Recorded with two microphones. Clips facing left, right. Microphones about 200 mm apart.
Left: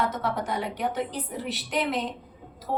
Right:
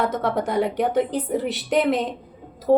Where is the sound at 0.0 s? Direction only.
55° right (ahead or behind).